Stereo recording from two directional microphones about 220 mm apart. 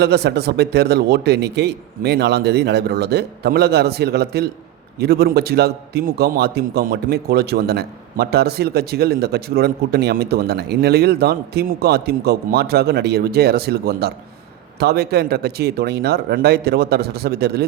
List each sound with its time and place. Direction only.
0.0 s a man's voice: 50° right (ahead or behind)